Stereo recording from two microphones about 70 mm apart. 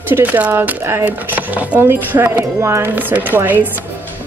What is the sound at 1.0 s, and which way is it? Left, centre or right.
Speech, right.